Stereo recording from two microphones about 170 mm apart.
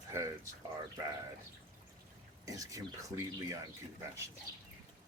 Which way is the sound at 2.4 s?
20° right (ahead or behind).